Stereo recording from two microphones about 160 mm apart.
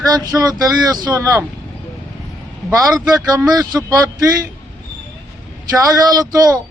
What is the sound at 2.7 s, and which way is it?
Speech, 20° right (ahead or behind).